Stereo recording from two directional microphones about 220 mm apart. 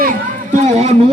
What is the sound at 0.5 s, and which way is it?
Speech, 30° right (ahead or behind).